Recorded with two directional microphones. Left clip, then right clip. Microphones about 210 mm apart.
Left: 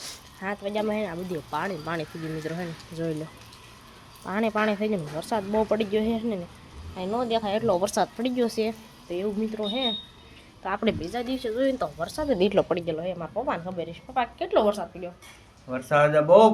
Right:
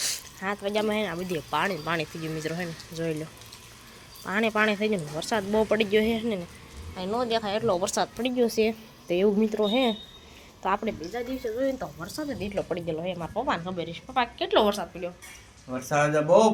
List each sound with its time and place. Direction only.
0.4 s speech: 5° left (ahead or behind)
4.3 s speech: 5° left (ahead or behind); by 8.3 s 20° left (ahead or behind)
8.4 s speech: 5° right (ahead or behind)
9.0 s speech: 30° right (ahead or behind)
10.6 s a woman's voice: 15° right (ahead or behind)
11.1 s speech: 15° left (ahead or behind)
12.3 s a woman's voice: 35° left (ahead or behind)
12.6 s speech: 5° left (ahead or behind)
15.9 s speech: 10° left (ahead or behind)